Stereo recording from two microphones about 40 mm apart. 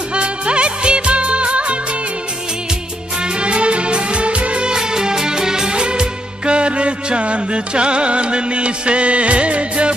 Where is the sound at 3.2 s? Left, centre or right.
Right.